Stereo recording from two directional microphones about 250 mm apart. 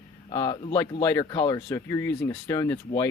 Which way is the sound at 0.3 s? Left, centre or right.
Centre.